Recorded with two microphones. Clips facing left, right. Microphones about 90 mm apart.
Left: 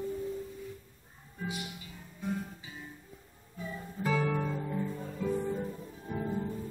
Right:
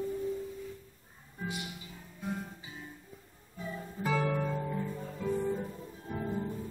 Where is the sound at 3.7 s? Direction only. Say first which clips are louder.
Even; centre (ahead or behind).